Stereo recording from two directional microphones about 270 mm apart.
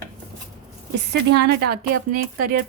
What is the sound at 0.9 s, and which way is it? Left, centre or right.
Speech, right.